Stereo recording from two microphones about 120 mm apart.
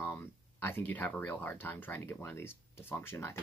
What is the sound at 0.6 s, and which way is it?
Speech, 15° left (ahead or behind).